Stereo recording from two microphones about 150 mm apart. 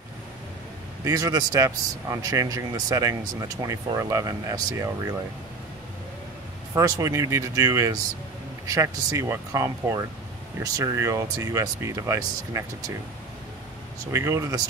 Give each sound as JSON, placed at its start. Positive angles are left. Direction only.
{"t": 1.0, "sound": "speech", "side_deg": -25}
{"t": 6.7, "sound": "speech", "side_deg": -20}
{"t": 14.1, "sound": "speech", "side_deg": -20}